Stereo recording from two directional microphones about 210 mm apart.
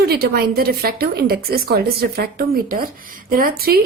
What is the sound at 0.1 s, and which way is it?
A woman's voice, 45° right (ahead or behind).